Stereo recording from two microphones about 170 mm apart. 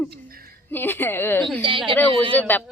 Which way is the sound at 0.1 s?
60° right (ahead or behind).